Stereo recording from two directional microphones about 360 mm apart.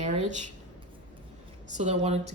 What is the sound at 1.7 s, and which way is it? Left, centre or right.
Speech, centre.